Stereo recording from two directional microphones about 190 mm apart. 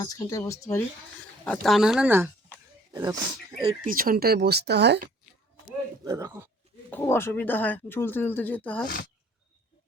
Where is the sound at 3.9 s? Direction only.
50° right (ahead or behind).